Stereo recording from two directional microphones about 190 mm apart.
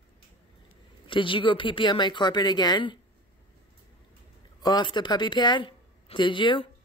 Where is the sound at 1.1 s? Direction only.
25° left (ahead or behind).